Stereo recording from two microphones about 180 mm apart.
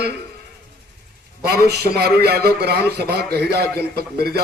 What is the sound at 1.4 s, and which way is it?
A man's voice, 60° right (ahead or behind).